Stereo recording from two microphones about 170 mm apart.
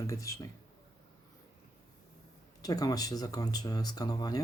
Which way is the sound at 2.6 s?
20° left (ahead or behind).